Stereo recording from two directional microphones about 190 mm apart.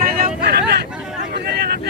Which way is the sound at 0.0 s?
45° right (ahead or behind).